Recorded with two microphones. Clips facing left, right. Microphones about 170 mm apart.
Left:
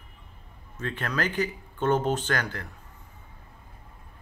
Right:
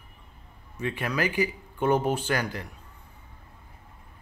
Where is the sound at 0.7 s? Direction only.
10° right (ahead or behind).